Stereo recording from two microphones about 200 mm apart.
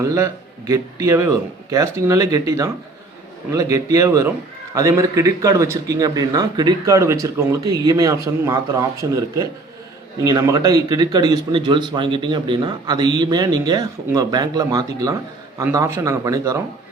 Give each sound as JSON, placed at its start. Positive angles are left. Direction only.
{"t": 0.0, "sound": "a man's voice", "side_deg": -15}